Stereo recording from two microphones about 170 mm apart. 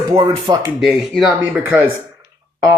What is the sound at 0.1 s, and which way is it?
Speech, 20° right (ahead or behind).